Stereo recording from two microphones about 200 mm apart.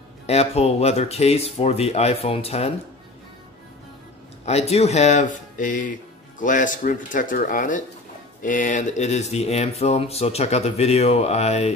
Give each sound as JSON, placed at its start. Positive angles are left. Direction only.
{"t": 0.3, "sound": "speech", "side_deg": 30}
{"t": 4.5, "sound": "speech", "side_deg": 30}